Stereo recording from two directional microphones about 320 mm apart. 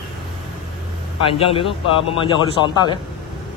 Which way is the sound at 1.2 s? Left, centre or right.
Centre.